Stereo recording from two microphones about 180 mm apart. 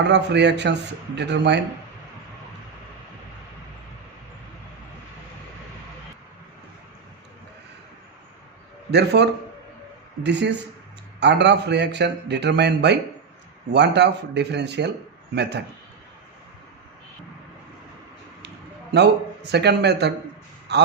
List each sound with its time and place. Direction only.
0.0 s a man's voice: 70° right (ahead or behind)
8.9 s a man's voice: 70° right (ahead or behind)
18.4 s a sound: 70° right (ahead or behind)
20.7 s a man's voice: 65° right (ahead or behind)